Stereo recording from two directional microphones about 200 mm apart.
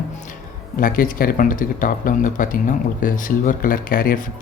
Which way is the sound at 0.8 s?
45° left (ahead or behind).